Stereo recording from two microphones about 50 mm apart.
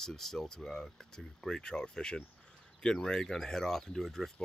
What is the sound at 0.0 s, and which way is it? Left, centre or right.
Speech, centre.